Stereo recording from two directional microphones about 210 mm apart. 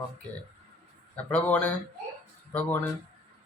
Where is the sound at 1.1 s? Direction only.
5° left (ahead or behind).